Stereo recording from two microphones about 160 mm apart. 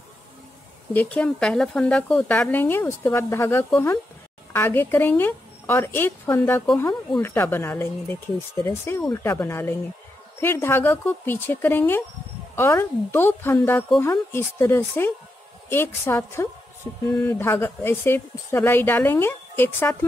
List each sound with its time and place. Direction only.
0.9 s a woman's voice: 5° left (ahead or behind)